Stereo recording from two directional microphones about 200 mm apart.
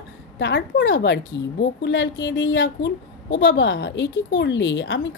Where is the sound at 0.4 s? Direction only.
65° left (ahead or behind).